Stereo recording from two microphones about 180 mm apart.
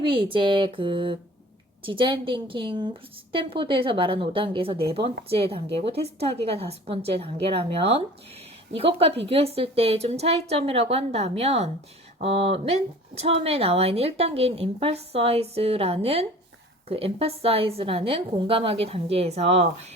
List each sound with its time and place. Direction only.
0.0 s speech: 30° right (ahead or behind)